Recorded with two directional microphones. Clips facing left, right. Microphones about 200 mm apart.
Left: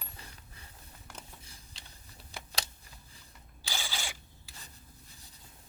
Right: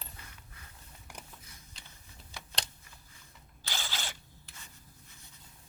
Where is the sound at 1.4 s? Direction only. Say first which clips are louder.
Left 1 dB; 30° left (ahead or behind).